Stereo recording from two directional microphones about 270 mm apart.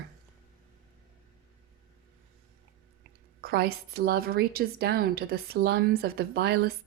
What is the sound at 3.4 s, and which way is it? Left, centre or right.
A woman's voice, right.